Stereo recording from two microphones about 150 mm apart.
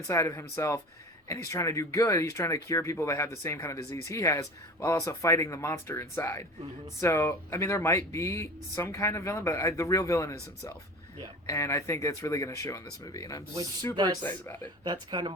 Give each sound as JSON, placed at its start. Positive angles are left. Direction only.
{"t": 0.1, "sound": "speech", "side_deg": 20}
{"t": 14.2, "sound": "speech", "side_deg": 15}
{"t": 14.8, "sound": "speech", "side_deg": -30}